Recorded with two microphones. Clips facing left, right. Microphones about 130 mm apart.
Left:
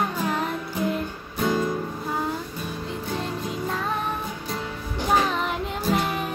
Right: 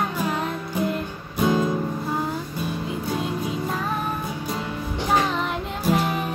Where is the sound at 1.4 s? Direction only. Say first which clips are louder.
Right 3 dB; 20° right (ahead or behind).